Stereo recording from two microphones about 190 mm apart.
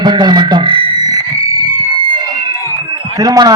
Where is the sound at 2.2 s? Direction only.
20° right (ahead or behind).